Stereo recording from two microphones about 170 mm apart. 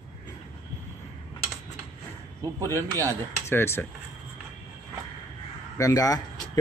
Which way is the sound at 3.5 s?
15° left (ahead or behind).